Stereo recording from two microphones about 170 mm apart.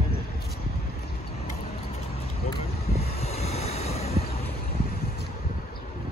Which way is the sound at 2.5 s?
40° left (ahead or behind).